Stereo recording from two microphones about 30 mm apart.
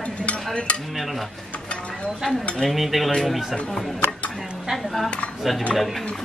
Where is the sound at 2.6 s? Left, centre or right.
Centre.